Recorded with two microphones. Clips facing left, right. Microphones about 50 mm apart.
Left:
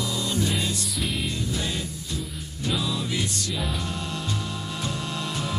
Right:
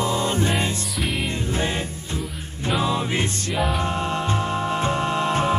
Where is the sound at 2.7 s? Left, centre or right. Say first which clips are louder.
Right 6 dB; right.